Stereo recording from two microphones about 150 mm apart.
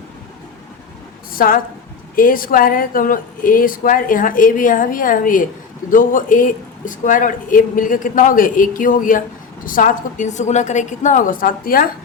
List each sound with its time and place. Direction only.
1.3 s a woman's voice: 70° left (ahead or behind)